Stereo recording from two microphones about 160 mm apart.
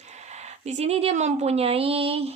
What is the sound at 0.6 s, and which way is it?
A woman's voice, 40° right (ahead or behind).